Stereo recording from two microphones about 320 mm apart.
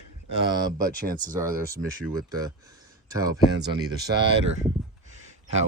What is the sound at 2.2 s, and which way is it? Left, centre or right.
Speech, centre.